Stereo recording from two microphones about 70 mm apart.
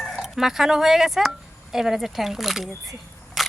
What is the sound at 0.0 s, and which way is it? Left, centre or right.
Speech, centre.